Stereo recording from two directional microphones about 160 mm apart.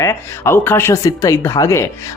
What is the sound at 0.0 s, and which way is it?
Speech, 15° left (ahead or behind).